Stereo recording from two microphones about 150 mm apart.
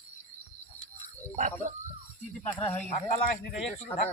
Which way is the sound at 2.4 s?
15° left (ahead or behind).